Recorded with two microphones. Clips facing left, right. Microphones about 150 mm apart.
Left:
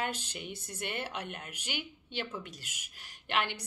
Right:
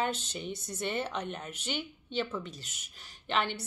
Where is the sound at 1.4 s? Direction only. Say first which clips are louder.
Right 4 dB; 10° left (ahead or behind).